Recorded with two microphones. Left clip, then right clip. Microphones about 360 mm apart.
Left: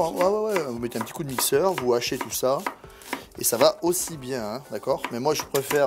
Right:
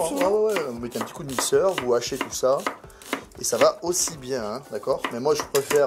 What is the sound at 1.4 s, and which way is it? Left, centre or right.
Speech, left.